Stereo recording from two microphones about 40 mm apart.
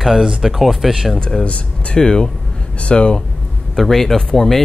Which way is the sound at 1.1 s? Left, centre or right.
Centre.